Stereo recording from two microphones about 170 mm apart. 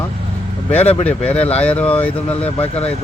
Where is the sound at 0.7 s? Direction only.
40° left (ahead or behind).